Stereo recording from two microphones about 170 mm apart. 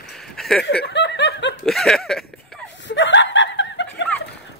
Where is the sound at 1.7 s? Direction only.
Centre (ahead or behind).